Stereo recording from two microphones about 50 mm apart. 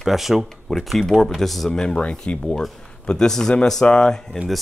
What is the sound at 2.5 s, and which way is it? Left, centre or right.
Speech, centre.